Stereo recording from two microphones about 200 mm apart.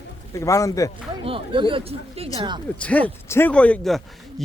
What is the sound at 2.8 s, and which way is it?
Speech, 5° left (ahead or behind).